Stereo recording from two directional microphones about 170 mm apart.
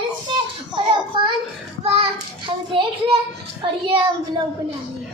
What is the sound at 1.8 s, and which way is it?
Child singing, 35° right (ahead or behind).